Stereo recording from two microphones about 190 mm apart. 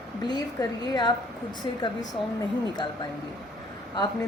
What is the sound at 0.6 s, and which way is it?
Speech, 20° left (ahead or behind).